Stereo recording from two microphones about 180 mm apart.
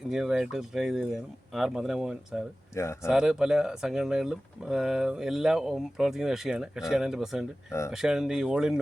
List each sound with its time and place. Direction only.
0.1 s speech: 5° right (ahead or behind)
2.7 s speech: 15° left (ahead or behind)
3.1 s speech: 5° right (ahead or behind)